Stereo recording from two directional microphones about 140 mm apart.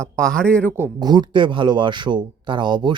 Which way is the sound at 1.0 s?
30° right (ahead or behind).